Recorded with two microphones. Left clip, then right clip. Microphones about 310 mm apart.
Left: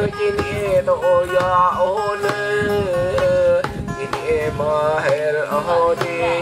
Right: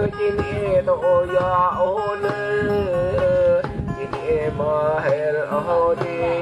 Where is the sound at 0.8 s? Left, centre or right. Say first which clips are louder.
Left 2 dB; centre.